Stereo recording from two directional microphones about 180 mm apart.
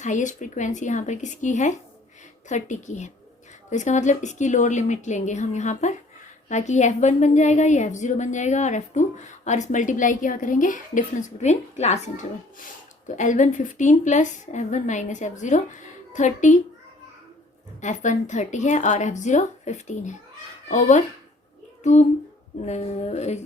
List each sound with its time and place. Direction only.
0.0 s a woman's voice: 45° left (ahead or behind)
17.7 s a woman's voice: 40° left (ahead or behind)
22.6 s a woman's voice: 40° left (ahead or behind)